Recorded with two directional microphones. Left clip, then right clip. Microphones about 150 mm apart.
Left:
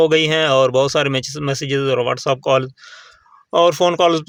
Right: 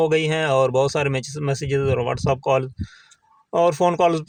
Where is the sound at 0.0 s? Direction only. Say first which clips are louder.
Left 5 dB; 30° left (ahead or behind).